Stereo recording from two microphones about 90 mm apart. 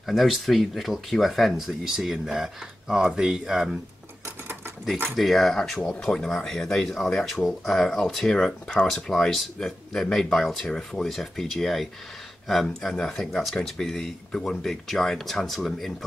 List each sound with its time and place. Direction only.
0.0 s speech: centre (ahead or behind)
5.1 s speech: centre (ahead or behind)